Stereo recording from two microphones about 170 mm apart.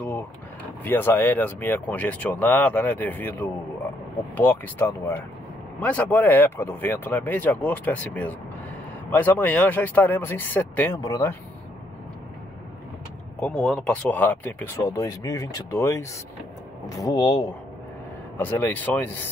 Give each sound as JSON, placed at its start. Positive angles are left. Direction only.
{"t": 0.8, "sound": "speech", "side_deg": 10}
{"t": 13.4, "sound": "speech", "side_deg": 0}
{"t": 18.4, "sound": "speech", "side_deg": 10}